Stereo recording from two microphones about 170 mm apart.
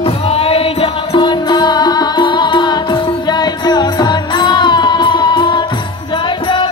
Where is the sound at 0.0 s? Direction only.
35° left (ahead or behind).